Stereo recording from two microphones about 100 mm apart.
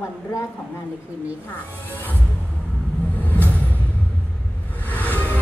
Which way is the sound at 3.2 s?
15° left (ahead or behind).